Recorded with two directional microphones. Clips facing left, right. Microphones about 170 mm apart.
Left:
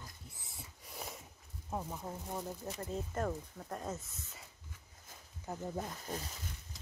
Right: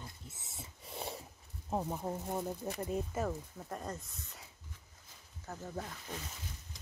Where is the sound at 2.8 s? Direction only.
15° right (ahead or behind).